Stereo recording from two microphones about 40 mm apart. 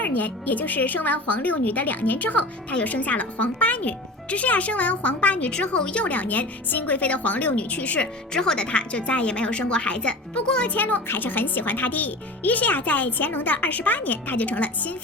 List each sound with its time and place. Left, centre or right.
0.0 s speech: left
6.1 s speech: left
8.3 s speech: centre
10.8 s speech: left